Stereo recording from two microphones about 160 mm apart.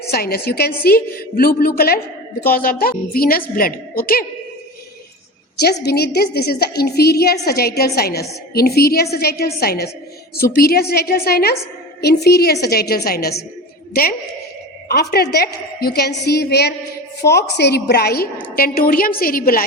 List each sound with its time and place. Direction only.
0.1 s a woman's voice: 75° left (ahead or behind)
5.5 s a woman's voice: 90° left; by 11.5 s 75° left (ahead or behind)
12.0 s a woman's voice: 90° left
13.9 s a woman's voice: 65° left (ahead or behind)
14.8 s a woman's voice: 75° left (ahead or behind)
18.5 s a woman's voice: 65° left (ahead or behind)